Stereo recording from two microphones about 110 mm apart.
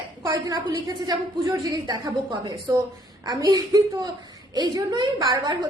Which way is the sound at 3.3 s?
35° right (ahead or behind).